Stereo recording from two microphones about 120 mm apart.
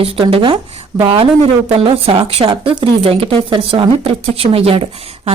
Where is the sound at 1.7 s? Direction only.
55° right (ahead or behind).